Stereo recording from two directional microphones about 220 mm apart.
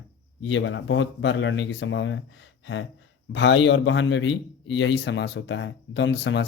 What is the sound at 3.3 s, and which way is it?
A man's voice, 55° left (ahead or behind).